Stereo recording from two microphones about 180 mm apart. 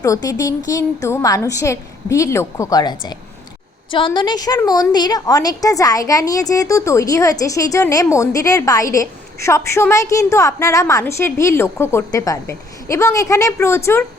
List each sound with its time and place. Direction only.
0.0 s a woman's voice: 20° left (ahead or behind)